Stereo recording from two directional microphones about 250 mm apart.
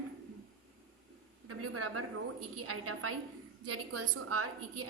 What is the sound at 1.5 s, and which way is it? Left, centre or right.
A woman's voice, right.